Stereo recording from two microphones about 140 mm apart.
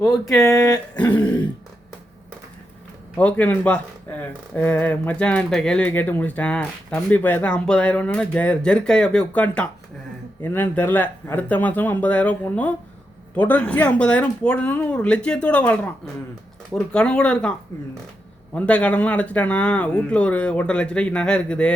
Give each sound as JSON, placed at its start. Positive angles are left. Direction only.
{"t": 0.3, "sound": "speech", "side_deg": 20}
{"t": 1.0, "sound": "throat clearing", "side_deg": 35}
{"t": 3.2, "sound": "speech", "side_deg": 10}
{"t": 18.5, "sound": "speech", "side_deg": 10}